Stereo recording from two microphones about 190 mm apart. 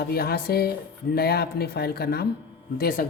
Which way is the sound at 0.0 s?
55° left (ahead or behind).